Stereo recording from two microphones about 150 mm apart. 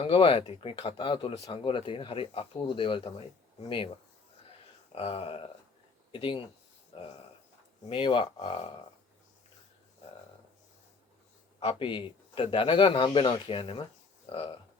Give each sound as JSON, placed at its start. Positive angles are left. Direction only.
{"t": 0.0, "sound": "speech", "side_deg": 35}
{"t": 4.9, "sound": "speech", "side_deg": 40}
{"t": 7.9, "sound": "speech", "side_deg": 35}
{"t": 11.6, "sound": "speech", "side_deg": 35}